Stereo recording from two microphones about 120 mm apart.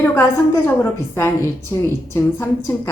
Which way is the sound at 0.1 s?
20° left (ahead or behind).